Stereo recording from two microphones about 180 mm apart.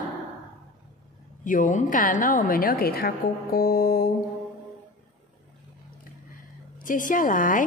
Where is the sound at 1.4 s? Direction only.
45° left (ahead or behind).